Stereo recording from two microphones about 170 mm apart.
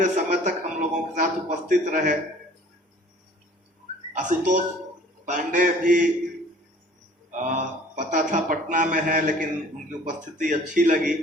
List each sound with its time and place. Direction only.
0.0 s a sound: 50° right (ahead or behind)
4.2 s speech: 50° right (ahead or behind)
7.3 s speech: 45° right (ahead or behind)